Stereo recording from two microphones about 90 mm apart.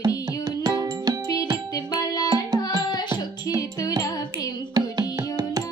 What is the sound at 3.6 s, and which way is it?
Music, 40° left (ahead or behind).